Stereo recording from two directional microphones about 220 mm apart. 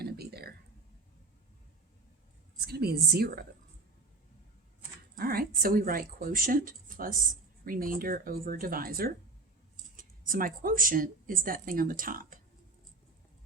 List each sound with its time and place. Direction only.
0.0 s a sound: 45° right (ahead or behind)
2.6 s a woman's voice: 45° right (ahead or behind)
5.1 s speech: 45° right (ahead or behind)